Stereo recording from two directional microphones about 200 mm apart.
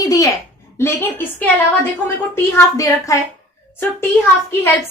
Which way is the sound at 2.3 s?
15° left (ahead or behind).